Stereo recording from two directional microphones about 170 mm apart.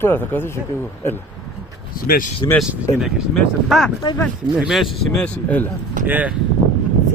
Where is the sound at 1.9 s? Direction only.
55° left (ahead or behind).